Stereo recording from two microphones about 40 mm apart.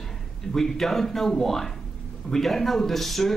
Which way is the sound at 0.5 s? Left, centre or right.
Centre.